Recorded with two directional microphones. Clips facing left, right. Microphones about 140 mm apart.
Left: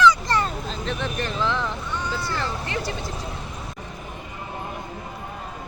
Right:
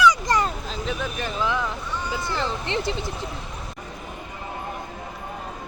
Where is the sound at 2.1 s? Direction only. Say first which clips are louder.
Right 4 dB; 15° right (ahead or behind).